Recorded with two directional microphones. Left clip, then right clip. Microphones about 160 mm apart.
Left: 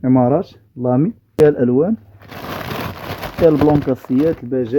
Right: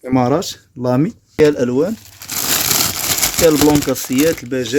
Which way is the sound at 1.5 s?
55° left (ahead or behind).